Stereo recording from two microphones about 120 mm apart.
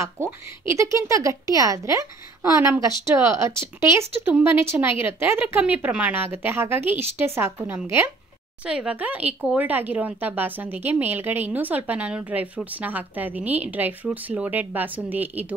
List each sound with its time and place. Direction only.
0.0 s speech: 25° right (ahead or behind)
8.6 s speech: 10° right (ahead or behind)